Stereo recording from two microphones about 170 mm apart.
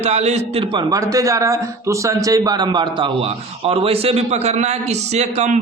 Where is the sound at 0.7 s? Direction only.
25° right (ahead or behind); by 5.5 s 40° right (ahead or behind).